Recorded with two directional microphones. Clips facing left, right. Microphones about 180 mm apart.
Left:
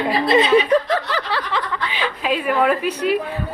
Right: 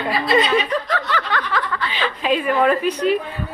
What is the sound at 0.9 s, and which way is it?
Snicker, 35° left (ahead or behind).